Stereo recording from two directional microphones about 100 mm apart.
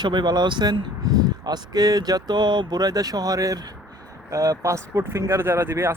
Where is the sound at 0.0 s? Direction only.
45° right (ahead or behind).